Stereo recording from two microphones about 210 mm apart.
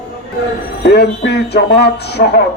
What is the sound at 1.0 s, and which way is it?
A man's voice, 50° left (ahead or behind).